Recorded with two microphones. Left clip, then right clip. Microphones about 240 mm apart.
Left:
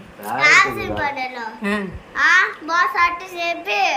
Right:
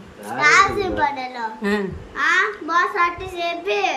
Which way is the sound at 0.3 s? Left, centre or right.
Centre.